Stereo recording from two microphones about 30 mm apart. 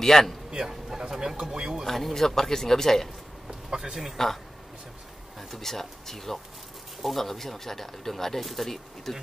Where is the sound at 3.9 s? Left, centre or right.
Centre.